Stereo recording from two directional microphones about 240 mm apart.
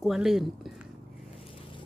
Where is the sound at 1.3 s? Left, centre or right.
Left.